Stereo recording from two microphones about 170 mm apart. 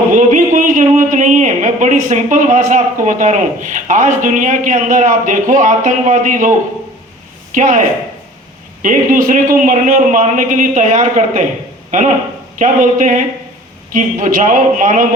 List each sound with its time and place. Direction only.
0.1 s speech: 50° right (ahead or behind)
7.5 s a man's voice: 50° right (ahead or behind)